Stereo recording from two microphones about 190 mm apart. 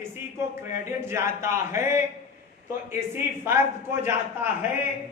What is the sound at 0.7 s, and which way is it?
A man's voice, 15° right (ahead or behind).